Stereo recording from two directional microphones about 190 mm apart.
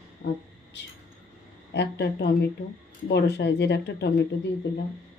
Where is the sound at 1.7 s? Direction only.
60° left (ahead or behind).